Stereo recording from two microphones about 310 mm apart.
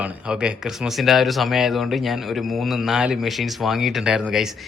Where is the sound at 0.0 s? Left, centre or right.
Centre.